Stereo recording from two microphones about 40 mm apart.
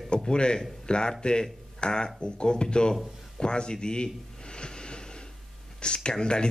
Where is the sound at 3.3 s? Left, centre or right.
Left.